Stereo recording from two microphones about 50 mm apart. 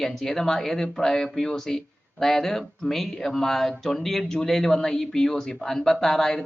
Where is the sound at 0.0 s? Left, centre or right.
Centre.